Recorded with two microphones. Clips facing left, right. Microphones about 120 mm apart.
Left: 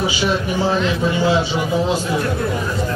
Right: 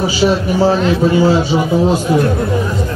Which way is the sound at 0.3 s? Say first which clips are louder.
Right 5 dB; 40° right (ahead or behind).